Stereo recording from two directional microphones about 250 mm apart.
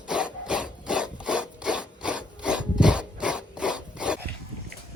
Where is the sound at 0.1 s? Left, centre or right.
Centre.